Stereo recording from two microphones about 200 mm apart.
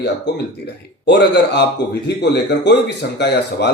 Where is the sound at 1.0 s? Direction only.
55° left (ahead or behind).